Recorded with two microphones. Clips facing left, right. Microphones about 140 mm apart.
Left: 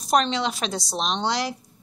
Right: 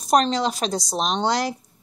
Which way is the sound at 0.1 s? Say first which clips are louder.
Right 3 dB; 40° right (ahead or behind).